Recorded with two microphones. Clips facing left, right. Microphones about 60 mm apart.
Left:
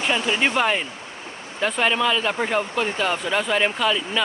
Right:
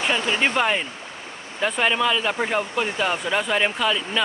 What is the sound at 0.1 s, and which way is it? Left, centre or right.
Speech, centre.